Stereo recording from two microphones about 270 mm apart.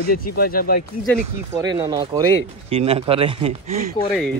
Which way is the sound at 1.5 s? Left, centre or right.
Centre.